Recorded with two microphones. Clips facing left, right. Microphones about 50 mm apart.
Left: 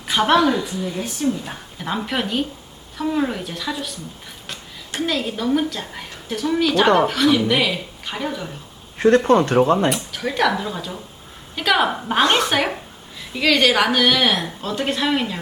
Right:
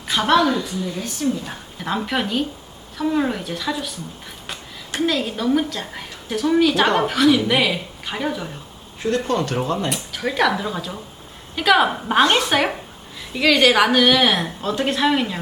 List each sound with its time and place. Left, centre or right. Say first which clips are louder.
0.1 s a woman's voice: left 1 dB; centre
4.9 s a woman's voice: right 2 dB; centre
9.0 s speech: left 7 dB; left
9.9 s a woman's voice: even; centre